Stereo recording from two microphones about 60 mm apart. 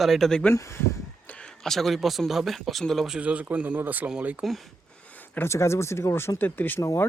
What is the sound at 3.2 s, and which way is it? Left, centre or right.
Speech, right.